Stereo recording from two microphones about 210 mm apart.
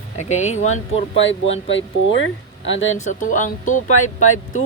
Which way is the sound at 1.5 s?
65° left (ahead or behind).